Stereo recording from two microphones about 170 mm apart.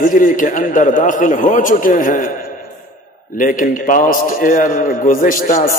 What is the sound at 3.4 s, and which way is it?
A man's voice, 55° left (ahead or behind).